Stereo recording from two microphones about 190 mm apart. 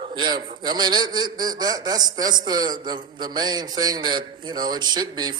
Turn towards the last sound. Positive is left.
turn(degrees=-20)  # may be behind; listen again after turning